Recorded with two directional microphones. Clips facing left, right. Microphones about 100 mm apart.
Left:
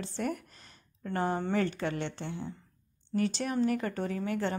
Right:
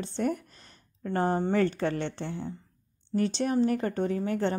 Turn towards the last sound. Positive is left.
turn(degrees=-35)  # may be behind; listen again after turning